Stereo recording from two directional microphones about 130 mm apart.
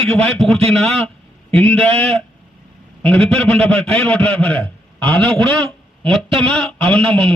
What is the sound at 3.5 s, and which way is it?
Speech, 50° right (ahead or behind).